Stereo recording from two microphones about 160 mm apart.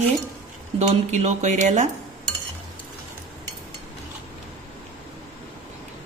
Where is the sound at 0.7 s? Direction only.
45° right (ahead or behind).